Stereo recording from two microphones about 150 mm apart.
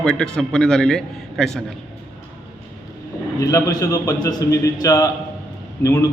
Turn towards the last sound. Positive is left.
turn(degrees=20)  # may be behind; listen again after turning